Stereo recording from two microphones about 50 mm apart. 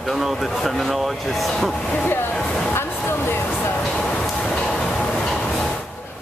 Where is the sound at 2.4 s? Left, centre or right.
Centre.